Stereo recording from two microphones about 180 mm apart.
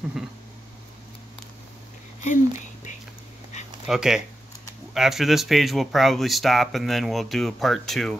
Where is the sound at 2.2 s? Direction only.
45° left (ahead or behind).